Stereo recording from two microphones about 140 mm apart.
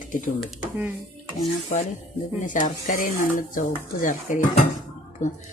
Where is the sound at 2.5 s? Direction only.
70° left (ahead or behind).